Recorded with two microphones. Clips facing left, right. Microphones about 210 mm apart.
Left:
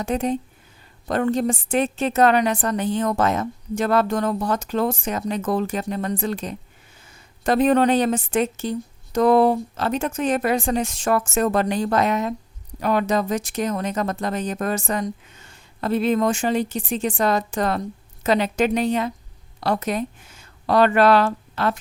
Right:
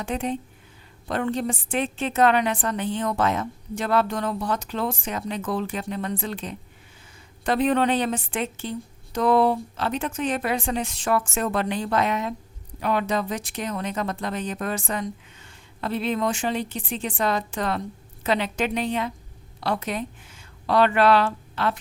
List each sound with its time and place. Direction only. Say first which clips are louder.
0.0 s a woman's voice: left 5 dB; 40° left (ahead or behind)